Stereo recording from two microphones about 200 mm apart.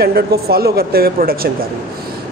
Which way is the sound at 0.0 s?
50° right (ahead or behind).